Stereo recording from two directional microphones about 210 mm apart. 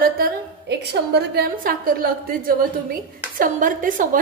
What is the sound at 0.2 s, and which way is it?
A woman's voice, 50° right (ahead or behind).